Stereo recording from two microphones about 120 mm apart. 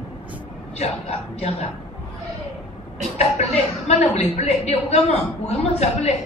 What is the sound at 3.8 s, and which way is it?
A woman's voice, 65° left (ahead or behind).